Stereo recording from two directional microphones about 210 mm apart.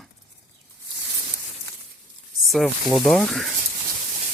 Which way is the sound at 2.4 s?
Centre (ahead or behind).